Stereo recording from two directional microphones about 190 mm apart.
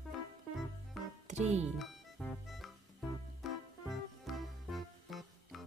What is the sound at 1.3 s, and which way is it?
Speech, 35° right (ahead or behind).